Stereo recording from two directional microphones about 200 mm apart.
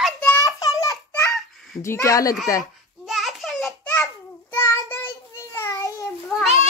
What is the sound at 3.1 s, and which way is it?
Child singing, centre (ahead or behind).